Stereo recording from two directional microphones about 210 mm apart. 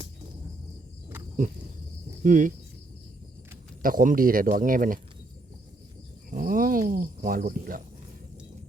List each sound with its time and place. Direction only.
2.2 s speech: 40° right (ahead or behind)
3.8 s speech: 40° right (ahead or behind)
6.3 s speech: 40° right (ahead or behind)